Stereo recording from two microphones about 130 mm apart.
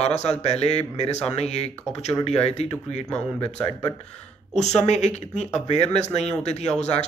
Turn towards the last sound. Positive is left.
turn(degrees=60)  # may be behind; listen again after turning